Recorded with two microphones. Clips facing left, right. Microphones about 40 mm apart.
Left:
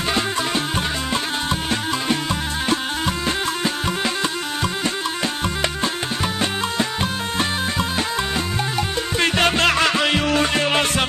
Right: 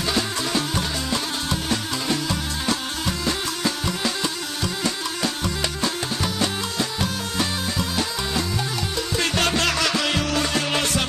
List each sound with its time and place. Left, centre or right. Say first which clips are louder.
0.1 s music: left 3 dB; left